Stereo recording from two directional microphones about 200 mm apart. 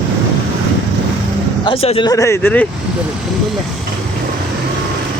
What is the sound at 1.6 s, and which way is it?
Speech, 25° left (ahead or behind).